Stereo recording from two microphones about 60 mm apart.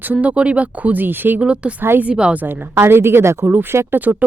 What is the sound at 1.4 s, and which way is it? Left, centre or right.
Speech, centre.